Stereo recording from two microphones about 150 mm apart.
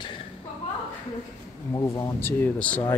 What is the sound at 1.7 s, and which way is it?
Speech, 20° left (ahead or behind).